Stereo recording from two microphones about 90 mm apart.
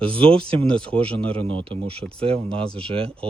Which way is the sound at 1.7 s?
90° right.